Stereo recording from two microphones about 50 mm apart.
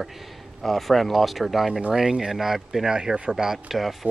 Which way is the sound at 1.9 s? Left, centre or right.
Centre.